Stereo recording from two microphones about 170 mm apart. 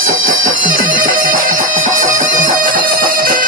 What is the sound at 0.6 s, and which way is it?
Music, 50° right (ahead or behind).